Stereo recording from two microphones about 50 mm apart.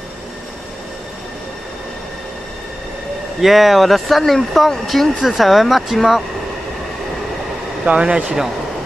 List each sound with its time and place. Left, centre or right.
3.3 s speech: centre
7.8 s speech: centre